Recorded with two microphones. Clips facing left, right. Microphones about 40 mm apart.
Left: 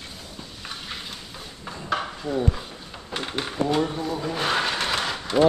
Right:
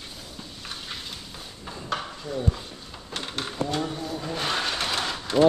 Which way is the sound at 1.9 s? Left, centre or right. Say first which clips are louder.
Left 5 dB; left.